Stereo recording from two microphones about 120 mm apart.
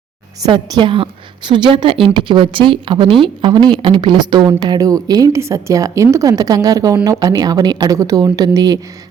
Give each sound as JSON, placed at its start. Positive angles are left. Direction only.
{"t": 0.4, "sound": "a woman's voice", "side_deg": -35}